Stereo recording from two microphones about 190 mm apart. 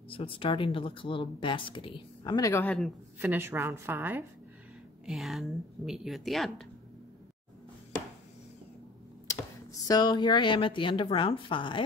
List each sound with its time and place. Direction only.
0.1 s speech: 30° left (ahead or behind); by 2.9 s 10° left (ahead or behind)
3.2 s a woman's voice: 10° right (ahead or behind)
5.0 s speech: centre (ahead or behind)
9.3 s speech: 20° left (ahead or behind)